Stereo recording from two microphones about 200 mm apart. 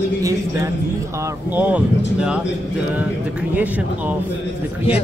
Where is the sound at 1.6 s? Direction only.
5° right (ahead or behind).